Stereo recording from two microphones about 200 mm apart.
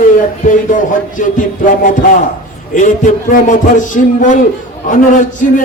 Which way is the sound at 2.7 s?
40° left (ahead or behind).